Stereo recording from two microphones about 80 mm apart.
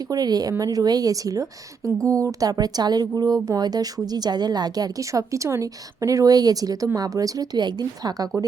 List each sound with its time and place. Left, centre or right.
0.1 s a woman's voice: right
4.9 s a woman's voice: right